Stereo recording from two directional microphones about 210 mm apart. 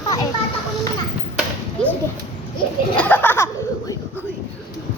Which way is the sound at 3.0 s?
10° left (ahead or behind).